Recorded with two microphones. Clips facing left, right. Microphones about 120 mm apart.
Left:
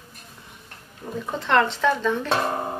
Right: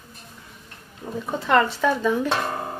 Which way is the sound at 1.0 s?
5° right (ahead or behind).